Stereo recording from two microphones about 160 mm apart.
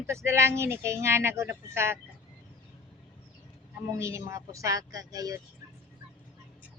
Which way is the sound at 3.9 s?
20° right (ahead or behind).